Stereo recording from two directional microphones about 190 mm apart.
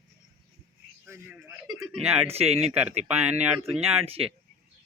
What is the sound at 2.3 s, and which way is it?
Speech, 30° right (ahead or behind).